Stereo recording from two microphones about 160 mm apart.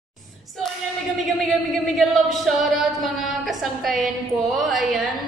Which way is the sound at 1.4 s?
Centre (ahead or behind).